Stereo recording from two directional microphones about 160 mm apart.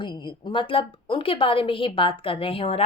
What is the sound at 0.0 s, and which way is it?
A woman's voice, 30° left (ahead or behind).